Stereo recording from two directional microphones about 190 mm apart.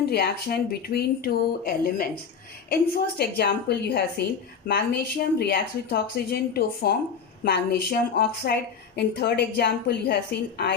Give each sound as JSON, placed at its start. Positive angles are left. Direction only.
{"t": 0.1, "sound": "a woman's voice", "side_deg": 60}